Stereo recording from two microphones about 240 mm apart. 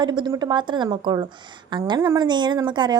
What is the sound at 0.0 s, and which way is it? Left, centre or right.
A woman's voice, centre.